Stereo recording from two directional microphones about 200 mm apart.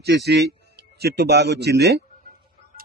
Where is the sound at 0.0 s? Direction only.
55° right (ahead or behind).